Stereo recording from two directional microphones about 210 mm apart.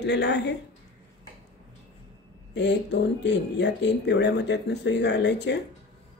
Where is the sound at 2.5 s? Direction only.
55° left (ahead or behind).